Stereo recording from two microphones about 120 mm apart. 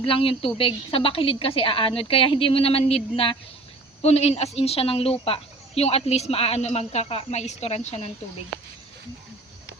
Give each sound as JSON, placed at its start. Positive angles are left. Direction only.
{"t": 0.0, "sound": "a woman's voice", "side_deg": 50}
{"t": 4.0, "sound": "speech", "side_deg": 60}